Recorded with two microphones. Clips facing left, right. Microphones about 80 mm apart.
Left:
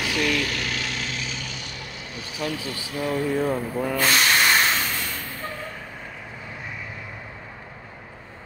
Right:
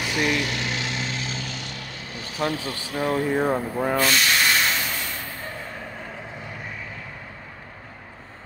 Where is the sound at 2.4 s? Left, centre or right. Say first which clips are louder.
Right 3 dB; right.